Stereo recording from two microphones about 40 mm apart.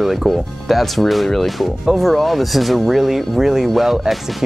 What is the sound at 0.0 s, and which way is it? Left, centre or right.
Speech, centre.